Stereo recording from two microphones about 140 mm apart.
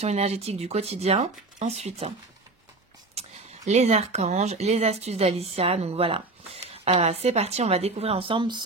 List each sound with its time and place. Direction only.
0.0 s speech: 50° right (ahead or behind)
3.2 s speech: 50° right (ahead or behind); by 8.6 s 35° right (ahead or behind)